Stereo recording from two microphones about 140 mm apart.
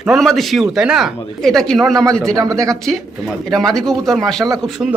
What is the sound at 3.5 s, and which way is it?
Speech, 5° left (ahead or behind).